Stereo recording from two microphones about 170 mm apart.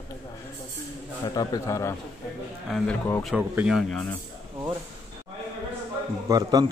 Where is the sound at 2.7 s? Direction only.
Centre (ahead or behind).